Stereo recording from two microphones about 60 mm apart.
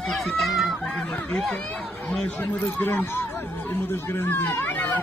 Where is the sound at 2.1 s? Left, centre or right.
Centre.